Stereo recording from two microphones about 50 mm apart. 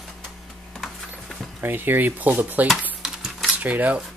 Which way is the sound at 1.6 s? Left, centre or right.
Right.